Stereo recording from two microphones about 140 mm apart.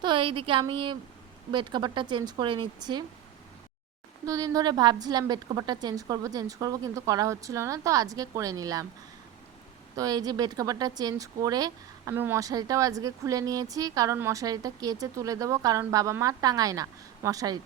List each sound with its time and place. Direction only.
0.0 s a woman's voice: 35° right (ahead or behind)
4.3 s a woman's voice: 25° right (ahead or behind)
9.9 s a woman's voice: 25° right (ahead or behind)
12.1 s a woman's voice: 15° right (ahead or behind)